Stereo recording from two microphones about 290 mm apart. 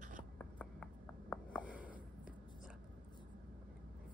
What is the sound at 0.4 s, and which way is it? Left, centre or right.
Writing, centre.